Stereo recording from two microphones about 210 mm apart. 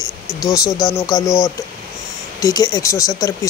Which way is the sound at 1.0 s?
15° left (ahead or behind).